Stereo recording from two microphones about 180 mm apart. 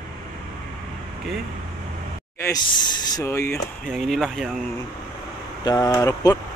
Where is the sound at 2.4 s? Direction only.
25° left (ahead or behind).